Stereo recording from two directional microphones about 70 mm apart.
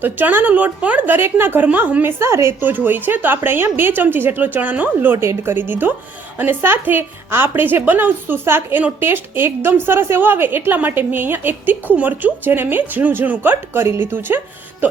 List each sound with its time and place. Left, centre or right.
0.0 s a woman's voice: right
2.6 s a woman's voice: right
5.1 s a woman's voice: right